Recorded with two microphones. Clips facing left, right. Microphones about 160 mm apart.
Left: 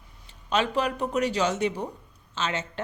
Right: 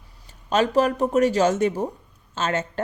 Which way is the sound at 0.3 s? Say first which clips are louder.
Right 5 dB; 45° right (ahead or behind).